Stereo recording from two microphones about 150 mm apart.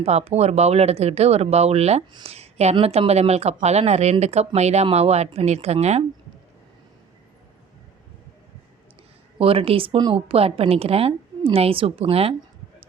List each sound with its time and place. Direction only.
0.0 s speech: 45° right (ahead or behind)
9.4 s a woman's voice: 40° right (ahead or behind)